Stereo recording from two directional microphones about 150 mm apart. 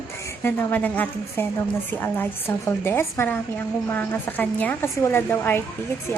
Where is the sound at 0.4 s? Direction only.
10° left (ahead or behind).